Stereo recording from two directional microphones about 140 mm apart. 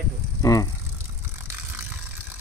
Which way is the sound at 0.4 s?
25° left (ahead or behind).